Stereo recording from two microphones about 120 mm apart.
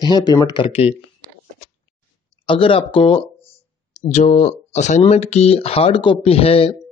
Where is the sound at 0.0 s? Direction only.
35° left (ahead or behind).